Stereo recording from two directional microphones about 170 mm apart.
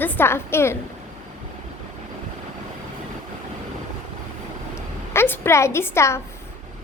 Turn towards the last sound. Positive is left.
turn(degrees=15)  # may be behind; listen again after turning